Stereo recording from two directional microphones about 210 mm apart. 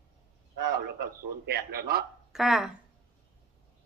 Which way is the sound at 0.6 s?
55° right (ahead or behind).